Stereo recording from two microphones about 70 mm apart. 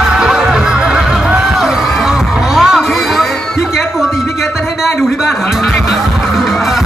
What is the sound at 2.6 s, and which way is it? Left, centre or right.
Music, centre.